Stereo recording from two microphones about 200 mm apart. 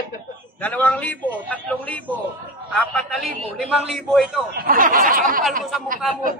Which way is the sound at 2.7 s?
Centre (ahead or behind).